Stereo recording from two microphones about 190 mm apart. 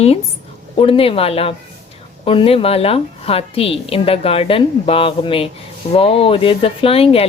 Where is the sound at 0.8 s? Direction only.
30° left (ahead or behind).